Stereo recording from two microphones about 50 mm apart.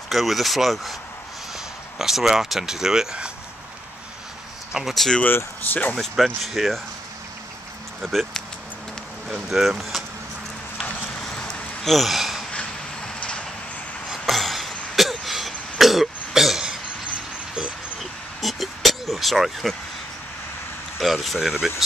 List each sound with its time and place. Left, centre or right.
0.1 s speech: centre
2.0 s speech: centre
4.8 s speech: centre
5.2 s speech: left
5.9 s speech: centre
8.0 s speech: centre
9.5 s speech: centre
11.3 s a sound: centre
11.9 s speech: centre
12.4 s vehicle: centre
14.2 s cough: centre
17.6 s a sound: centre
21.0 s speech: centre